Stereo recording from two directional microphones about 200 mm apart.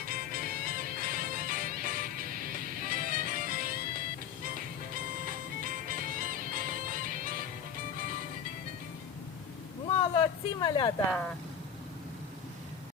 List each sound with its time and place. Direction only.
0.0 s music: 45° right (ahead or behind)
10.2 s speech: 20° left (ahead or behind)